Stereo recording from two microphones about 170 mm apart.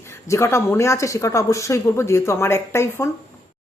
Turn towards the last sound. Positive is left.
turn(degrees=15)  # may be behind; listen again after turning